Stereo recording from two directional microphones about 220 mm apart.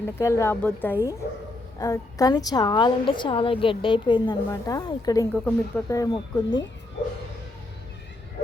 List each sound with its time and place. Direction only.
0.0 s a woman's voice: 15° left (ahead or behind)